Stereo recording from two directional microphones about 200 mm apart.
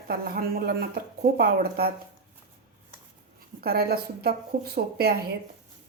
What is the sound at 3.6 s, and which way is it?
Speech, 50° right (ahead or behind).